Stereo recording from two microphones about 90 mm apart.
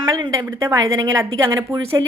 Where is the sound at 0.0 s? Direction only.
50° right (ahead or behind).